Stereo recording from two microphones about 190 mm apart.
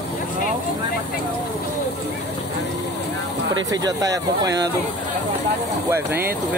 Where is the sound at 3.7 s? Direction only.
20° right (ahead or behind).